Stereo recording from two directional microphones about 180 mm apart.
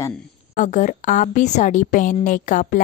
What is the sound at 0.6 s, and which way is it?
A woman's voice, 45° left (ahead or behind).